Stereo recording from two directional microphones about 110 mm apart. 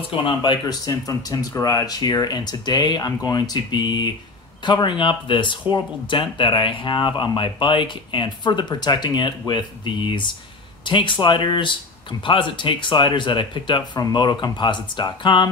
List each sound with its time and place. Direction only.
0.1 s speech: 45° left (ahead or behind)